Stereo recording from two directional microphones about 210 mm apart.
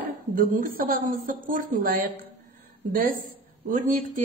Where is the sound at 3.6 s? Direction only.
40° right (ahead or behind).